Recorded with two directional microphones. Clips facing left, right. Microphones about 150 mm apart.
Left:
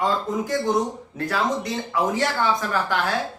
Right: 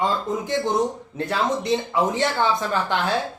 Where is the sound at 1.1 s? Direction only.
25° right (ahead or behind).